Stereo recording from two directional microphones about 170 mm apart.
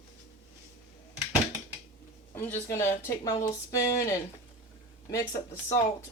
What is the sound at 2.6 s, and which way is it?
Speech, 15° left (ahead or behind).